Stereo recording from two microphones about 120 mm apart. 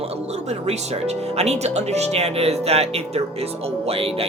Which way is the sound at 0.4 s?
65° right (ahead or behind).